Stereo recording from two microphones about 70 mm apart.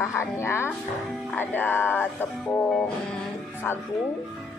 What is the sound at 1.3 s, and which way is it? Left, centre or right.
Music, left.